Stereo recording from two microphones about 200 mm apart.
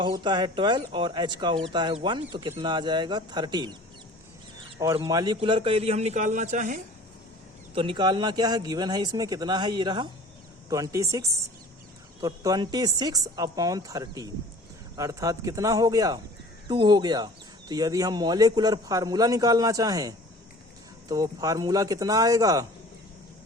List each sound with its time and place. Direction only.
0.0 s speech: 25° right (ahead or behind)
4.8 s speech: 20° right (ahead or behind); by 6.8 s 40° right (ahead or behind)
7.8 s a man's voice: 25° right (ahead or behind)